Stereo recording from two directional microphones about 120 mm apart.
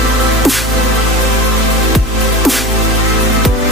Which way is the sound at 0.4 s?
Centre (ahead or behind).